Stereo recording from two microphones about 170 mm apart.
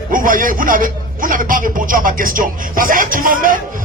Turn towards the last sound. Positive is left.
turn(degrees=-55)  # may be behind; listen again after turning